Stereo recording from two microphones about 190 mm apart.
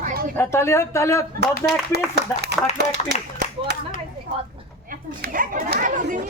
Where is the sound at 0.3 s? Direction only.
15° left (ahead or behind).